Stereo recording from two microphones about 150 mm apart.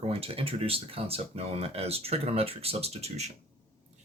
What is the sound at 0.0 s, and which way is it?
Speech, 40° right (ahead or behind).